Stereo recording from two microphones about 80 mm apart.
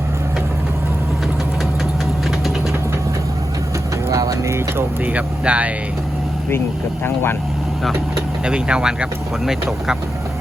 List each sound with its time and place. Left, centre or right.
4.1 s vehicle: right
5.0 s speech: centre
7.0 s speech: left
8.4 s speech: centre